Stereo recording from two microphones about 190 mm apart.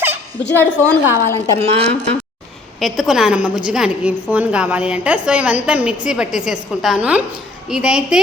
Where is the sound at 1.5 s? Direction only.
30° right (ahead or behind).